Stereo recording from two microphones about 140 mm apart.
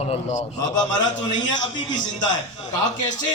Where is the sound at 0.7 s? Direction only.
30° left (ahead or behind).